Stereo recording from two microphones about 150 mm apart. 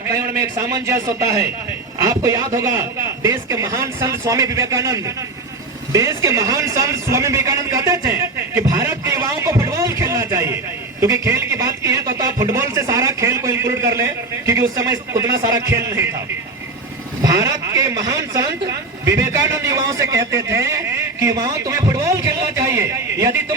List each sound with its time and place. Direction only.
0.1 s a man's voice: 20° right (ahead or behind)
17.2 s a man's voice: 20° right (ahead or behind)